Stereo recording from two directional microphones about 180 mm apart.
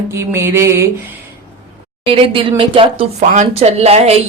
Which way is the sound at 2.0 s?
30° right (ahead or behind).